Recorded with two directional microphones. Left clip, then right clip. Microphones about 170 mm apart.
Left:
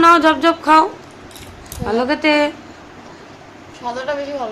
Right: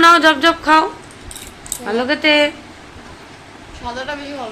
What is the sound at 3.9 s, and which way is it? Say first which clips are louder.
Speech: left 2 dB; 90° left.